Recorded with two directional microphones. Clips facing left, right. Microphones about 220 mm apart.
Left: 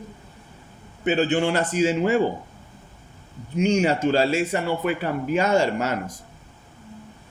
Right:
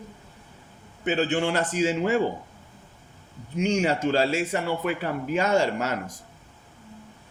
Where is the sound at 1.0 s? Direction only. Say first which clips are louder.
Left 3 dB; 15° left (ahead or behind).